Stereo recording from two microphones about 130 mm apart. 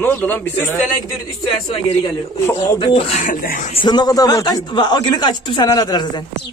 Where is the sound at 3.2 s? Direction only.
90° left.